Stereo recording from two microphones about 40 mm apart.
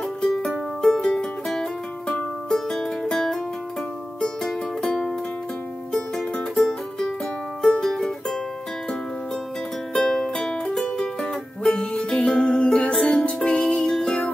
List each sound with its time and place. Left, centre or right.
0.8 s music: centre
6.5 s music: centre
9.9 s music: centre
11.6 s music: left
12.3 s music: centre
13.2 s music: left